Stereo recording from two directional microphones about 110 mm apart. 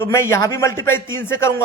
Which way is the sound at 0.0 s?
25° left (ahead or behind).